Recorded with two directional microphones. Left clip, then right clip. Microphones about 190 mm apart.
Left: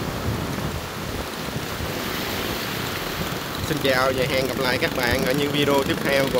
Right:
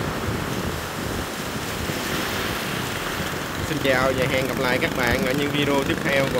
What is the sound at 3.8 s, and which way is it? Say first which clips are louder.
Speech: even; 35° left (ahead or behind).